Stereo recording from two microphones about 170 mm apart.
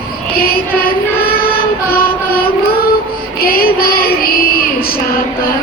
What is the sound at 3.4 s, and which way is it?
Child singing, 60° left (ahead or behind).